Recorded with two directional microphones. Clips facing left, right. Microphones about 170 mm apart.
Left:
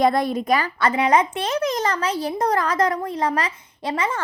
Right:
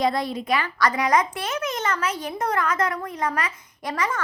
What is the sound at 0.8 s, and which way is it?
A child's voice, 25° left (ahead or behind).